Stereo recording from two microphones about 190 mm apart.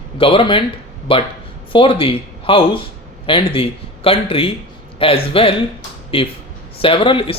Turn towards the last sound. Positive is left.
turn(degrees=30)  # may be behind; listen again after turning